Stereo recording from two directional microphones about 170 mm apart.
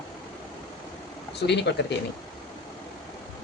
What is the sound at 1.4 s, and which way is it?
Speech, 85° left.